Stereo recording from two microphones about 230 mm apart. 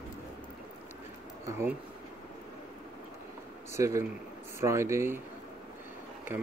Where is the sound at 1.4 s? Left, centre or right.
Centre.